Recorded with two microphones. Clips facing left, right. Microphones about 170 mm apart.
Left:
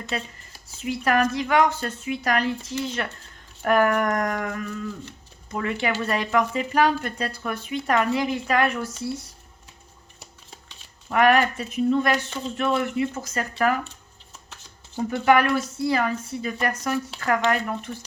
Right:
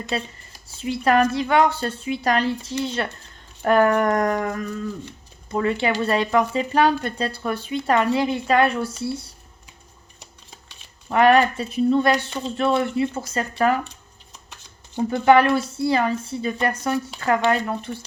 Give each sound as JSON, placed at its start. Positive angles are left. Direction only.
{"t": 0.1, "sound": "speech", "side_deg": -30}
{"t": 11.1, "sound": "speech", "side_deg": -30}
{"t": 15.1, "sound": "speech", "side_deg": -30}